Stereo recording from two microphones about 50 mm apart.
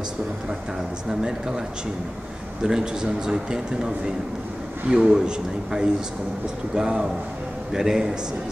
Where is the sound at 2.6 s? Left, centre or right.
Centre.